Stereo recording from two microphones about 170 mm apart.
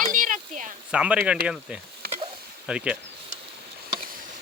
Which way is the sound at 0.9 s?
5° right (ahead or behind).